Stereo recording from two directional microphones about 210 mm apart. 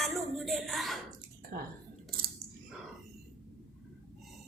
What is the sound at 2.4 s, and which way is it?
Clicking, 30° right (ahead or behind).